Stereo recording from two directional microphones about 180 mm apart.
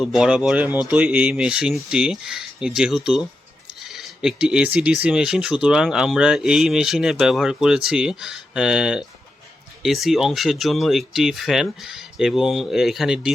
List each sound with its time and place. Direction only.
0.0 s speech: 5° right (ahead or behind)